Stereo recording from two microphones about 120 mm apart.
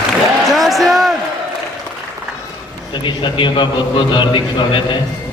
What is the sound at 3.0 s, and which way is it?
A man's voice, 40° left (ahead or behind).